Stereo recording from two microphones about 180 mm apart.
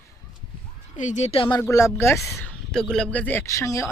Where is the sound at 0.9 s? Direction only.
40° left (ahead or behind).